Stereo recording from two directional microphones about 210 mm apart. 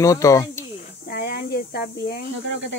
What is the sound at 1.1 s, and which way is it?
Snake, 50° left (ahead or behind).